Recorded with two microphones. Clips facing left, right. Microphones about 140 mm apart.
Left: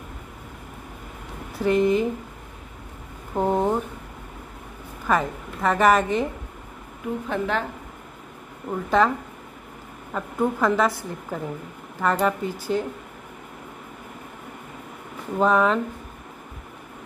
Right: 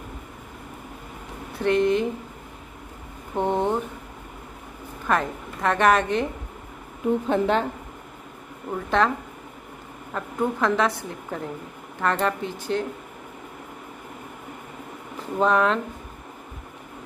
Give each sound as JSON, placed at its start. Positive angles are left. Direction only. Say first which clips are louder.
{"t": 1.6, "sound": "a woman's voice", "louder": "left 1 dB", "side_deg": 5}
{"t": 3.3, "sound": "a woman's voice", "louder": "left 1 dB", "side_deg": 5}
{"t": 5.0, "sound": "a woman's voice", "louder": "left 1 dB", "side_deg": 0}
{"t": 7.2, "sound": "a woman's voice", "louder": "right 3 dB", "side_deg": -25}
{"t": 8.6, "sound": "a woman's voice", "louder": "left 2 dB", "side_deg": 5}
{"t": 10.1, "sound": "a woman's voice", "louder": "left 2 dB", "side_deg": 0}
{"t": 15.3, "sound": "a woman's voice", "louder": "left 1 dB", "side_deg": 0}